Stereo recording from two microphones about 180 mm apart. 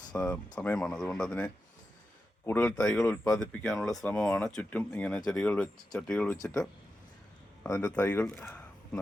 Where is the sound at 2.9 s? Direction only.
15° left (ahead or behind).